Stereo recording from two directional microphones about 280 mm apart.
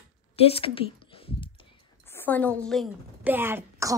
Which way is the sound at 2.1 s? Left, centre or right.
Centre.